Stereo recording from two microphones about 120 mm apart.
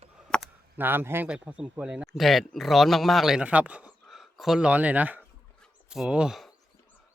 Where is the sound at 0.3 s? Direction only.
5° left (ahead or behind).